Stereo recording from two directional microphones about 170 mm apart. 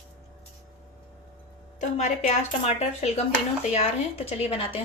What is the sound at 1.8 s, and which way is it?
Speech, 45° left (ahead or behind).